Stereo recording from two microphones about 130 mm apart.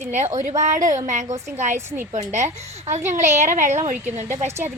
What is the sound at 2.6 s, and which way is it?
Speech, 55° right (ahead or behind).